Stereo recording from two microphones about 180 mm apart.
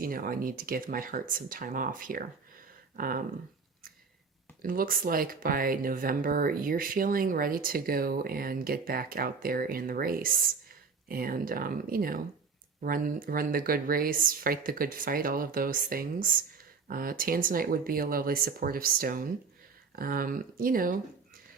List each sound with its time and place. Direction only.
0.0 s speech: 50° right (ahead or behind)
4.7 s speech: 50° right (ahead or behind)